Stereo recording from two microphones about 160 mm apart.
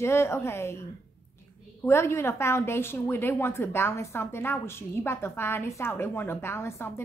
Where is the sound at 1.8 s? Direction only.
15° left (ahead or behind).